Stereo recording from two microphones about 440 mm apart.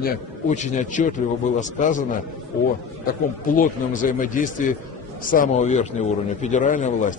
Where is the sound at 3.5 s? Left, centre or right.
Centre.